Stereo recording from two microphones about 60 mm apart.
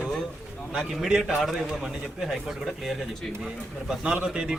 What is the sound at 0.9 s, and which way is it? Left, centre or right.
Speech, centre.